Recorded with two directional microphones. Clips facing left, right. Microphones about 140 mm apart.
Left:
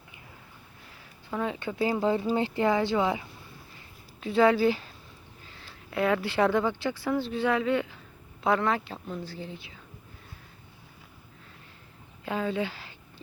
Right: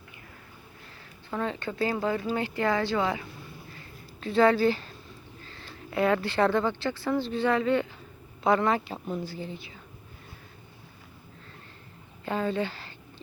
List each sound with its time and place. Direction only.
1.3 s speech: 10° left (ahead or behind)
12.2 s speech: 5° left (ahead or behind)